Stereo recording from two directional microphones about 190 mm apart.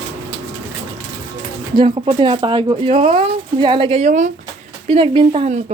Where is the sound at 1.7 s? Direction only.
25° right (ahead or behind).